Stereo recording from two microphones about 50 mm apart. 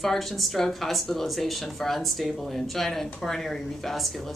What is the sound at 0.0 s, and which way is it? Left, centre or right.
Speech, centre.